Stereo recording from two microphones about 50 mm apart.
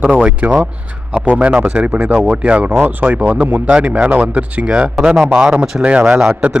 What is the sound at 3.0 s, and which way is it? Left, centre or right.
Speech, right.